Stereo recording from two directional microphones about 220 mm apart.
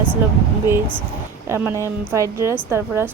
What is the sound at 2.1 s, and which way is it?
Speech, 15° right (ahead or behind).